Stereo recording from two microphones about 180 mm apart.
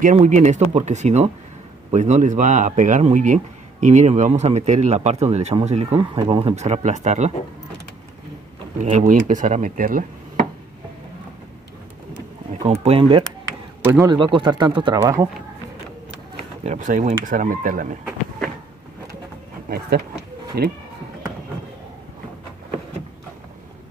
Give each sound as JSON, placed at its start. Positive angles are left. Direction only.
{"t": 0.0, "sound": "a man's voice", "side_deg": -40}
{"t": 8.7, "sound": "a man's voice", "side_deg": -45}
{"t": 12.6, "sound": "speech", "side_deg": -35}
{"t": 13.8, "sound": "speech", "side_deg": -20}
{"t": 16.6, "sound": "a man's voice", "side_deg": -45}
{"t": 20.6, "sound": "speech", "side_deg": -60}